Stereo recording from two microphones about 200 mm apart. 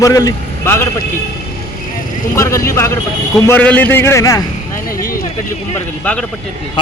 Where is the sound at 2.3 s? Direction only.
15° left (ahead or behind).